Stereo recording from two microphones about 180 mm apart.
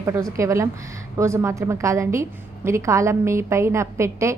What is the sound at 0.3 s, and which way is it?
A woman's voice, 15° right (ahead or behind).